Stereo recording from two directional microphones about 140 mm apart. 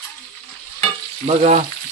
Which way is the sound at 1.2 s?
55° right (ahead or behind).